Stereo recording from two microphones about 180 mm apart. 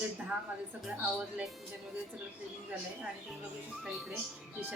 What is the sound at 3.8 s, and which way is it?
Speech, centre (ahead or behind).